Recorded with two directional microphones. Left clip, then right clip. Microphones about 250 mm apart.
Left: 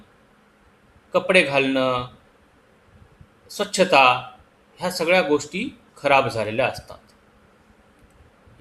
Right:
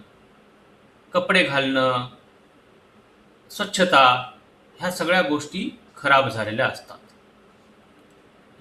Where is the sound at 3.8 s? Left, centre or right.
Centre.